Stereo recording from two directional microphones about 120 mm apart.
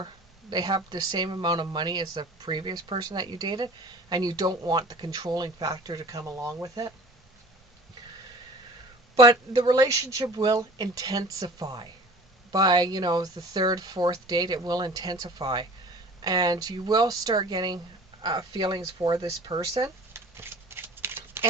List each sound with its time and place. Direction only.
0.5 s speech: 35° right (ahead or behind)
9.1 s speech: 35° right (ahead or behind)
18.2 s a sound: 35° right (ahead or behind)